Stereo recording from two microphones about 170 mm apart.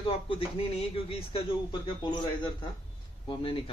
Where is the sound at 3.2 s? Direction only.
30° left (ahead or behind).